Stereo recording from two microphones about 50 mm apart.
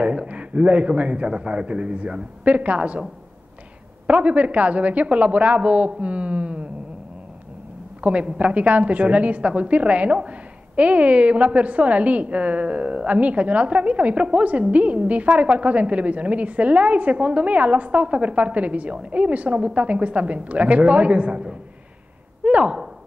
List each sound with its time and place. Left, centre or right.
0.0 s a woman's voice: right
4.1 s a woman's voice: right
8.0 s a woman's voice: right
22.4 s speech: right